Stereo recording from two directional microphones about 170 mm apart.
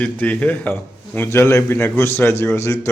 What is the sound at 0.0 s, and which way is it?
A man's voice, 10° left (ahead or behind).